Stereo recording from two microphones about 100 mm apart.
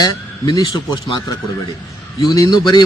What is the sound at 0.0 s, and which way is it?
Speech, 40° left (ahead or behind).